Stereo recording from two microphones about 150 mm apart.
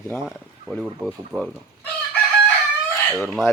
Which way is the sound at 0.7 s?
Centre (ahead or behind).